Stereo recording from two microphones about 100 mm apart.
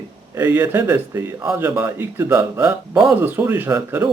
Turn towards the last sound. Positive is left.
turn(degrees=-20)  # may be behind; listen again after turning